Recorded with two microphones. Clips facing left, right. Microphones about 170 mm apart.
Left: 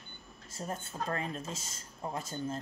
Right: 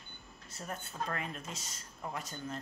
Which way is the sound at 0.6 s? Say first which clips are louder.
Left 3 dB; 25° left (ahead or behind).